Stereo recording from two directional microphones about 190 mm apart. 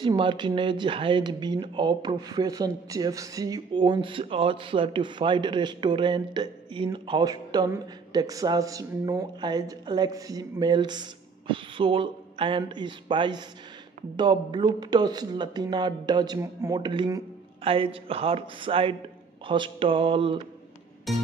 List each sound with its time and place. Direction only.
0.0 s speech: 25° right (ahead or behind)